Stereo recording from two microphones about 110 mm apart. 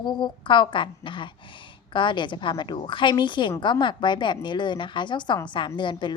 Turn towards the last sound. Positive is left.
turn(degrees=45)  # may be behind; listen again after turning